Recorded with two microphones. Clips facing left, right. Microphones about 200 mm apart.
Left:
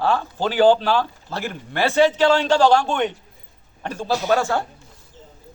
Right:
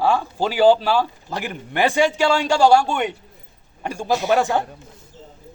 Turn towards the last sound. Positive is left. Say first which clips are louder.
# right 1 dB
turn(degrees=-15)  # may be behind; listen again after turning